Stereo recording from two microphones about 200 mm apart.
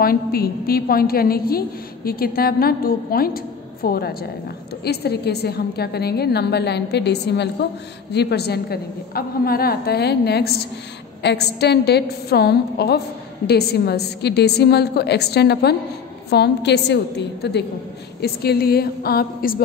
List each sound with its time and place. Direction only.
0.0 s a woman's voice: 50° left (ahead or behind)